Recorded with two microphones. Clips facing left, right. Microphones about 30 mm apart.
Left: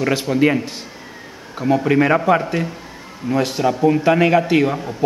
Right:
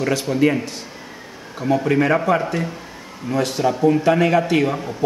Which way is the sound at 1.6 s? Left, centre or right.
Centre.